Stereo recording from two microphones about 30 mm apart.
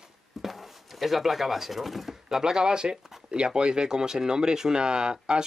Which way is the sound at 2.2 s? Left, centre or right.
Centre.